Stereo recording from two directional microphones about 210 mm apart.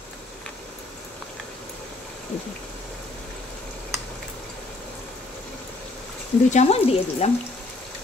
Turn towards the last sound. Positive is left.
turn(degrees=30)  # may be behind; listen again after turning